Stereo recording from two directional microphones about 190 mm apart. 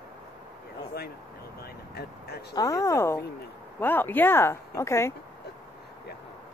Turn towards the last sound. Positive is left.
turn(degrees=15)  # may be behind; listen again after turning